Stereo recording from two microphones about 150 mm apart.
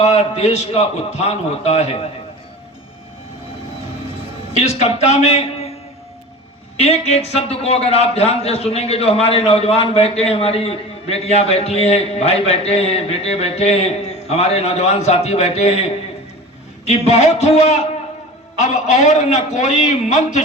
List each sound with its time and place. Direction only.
0.0 s a man's voice: 50° left (ahead or behind)
4.5 s a man's voice: 45° left (ahead or behind)
6.7 s a man's voice: 45° left (ahead or behind)
16.8 s a man's voice: 45° left (ahead or behind)